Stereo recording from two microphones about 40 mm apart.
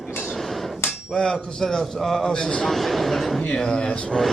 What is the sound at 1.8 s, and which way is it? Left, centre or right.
Speech, centre.